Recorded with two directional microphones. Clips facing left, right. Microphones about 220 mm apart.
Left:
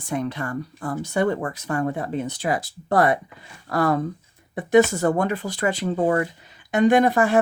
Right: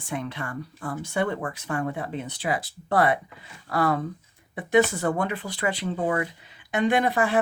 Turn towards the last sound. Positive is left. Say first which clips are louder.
# left 5 dB
turn(degrees=45)  # may be behind; listen again after turning